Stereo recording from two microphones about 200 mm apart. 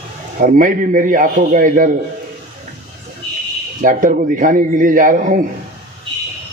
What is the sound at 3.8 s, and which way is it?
Speech, 40° right (ahead or behind).